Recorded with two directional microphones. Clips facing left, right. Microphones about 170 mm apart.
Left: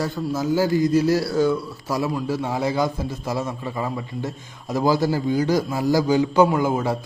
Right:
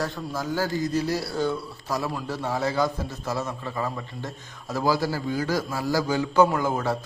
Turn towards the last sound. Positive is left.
turn(degrees=10)  # may be behind; listen again after turning